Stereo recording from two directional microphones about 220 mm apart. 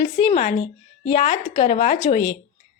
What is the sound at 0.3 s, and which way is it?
A woman's voice, 30° left (ahead or behind).